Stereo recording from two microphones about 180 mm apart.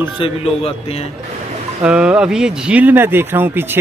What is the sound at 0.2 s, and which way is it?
Speech, 35° left (ahead or behind).